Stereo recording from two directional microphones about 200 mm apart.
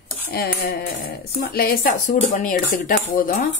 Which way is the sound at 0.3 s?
50° left (ahead or behind).